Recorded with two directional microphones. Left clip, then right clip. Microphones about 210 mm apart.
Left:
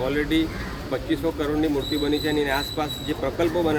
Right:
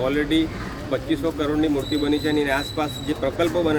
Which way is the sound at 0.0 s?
5° right (ahead or behind).